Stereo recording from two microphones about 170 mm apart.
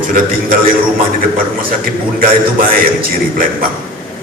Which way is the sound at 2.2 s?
60° right (ahead or behind).